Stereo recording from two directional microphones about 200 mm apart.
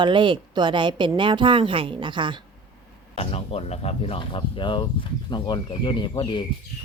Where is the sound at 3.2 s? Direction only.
30° left (ahead or behind).